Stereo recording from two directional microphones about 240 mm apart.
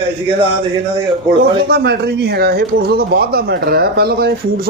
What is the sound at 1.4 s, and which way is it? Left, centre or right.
Speech, right.